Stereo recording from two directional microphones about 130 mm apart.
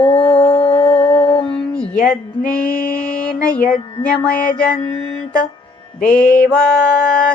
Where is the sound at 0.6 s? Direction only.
35° left (ahead or behind).